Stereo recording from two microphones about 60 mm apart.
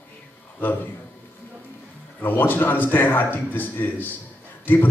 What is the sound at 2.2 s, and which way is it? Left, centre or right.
A man's voice, left.